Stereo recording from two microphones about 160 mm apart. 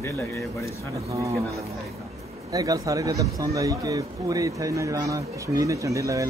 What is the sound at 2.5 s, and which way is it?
Speech, 20° right (ahead or behind).